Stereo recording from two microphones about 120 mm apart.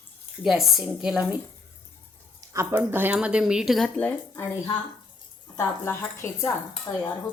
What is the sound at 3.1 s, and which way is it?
Speech, 5° right (ahead or behind).